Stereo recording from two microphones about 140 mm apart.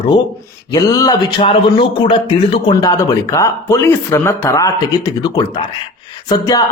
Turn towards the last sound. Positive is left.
turn(degrees=25)  # may be behind; listen again after turning